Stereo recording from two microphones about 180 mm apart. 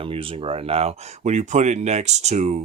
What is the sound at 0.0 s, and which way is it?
Speech, 30° right (ahead or behind).